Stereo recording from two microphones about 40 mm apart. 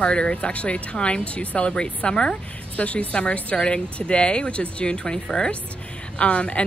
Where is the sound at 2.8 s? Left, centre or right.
Left.